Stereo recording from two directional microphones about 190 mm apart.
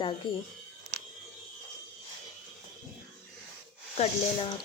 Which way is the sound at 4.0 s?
25° left (ahead or behind).